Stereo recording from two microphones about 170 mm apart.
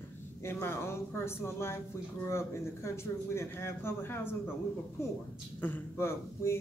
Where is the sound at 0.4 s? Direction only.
15° left (ahead or behind).